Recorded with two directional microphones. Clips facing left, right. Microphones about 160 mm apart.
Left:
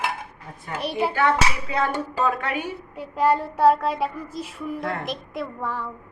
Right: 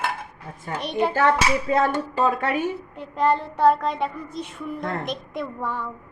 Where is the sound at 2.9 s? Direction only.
5° left (ahead or behind).